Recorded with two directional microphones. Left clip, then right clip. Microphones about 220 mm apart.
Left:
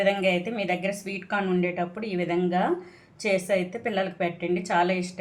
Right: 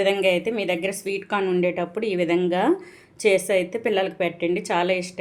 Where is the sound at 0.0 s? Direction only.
30° right (ahead or behind).